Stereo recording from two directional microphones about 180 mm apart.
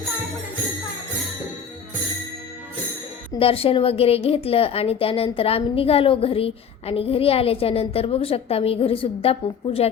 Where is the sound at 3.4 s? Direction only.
30° left (ahead or behind).